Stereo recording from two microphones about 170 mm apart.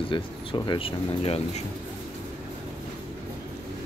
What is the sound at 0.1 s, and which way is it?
Speech, 30° left (ahead or behind).